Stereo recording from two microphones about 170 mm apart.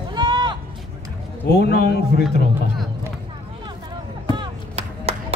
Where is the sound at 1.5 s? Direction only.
65° left (ahead or behind).